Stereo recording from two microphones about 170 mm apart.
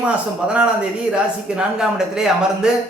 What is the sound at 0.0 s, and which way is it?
A man's voice, 5° right (ahead or behind).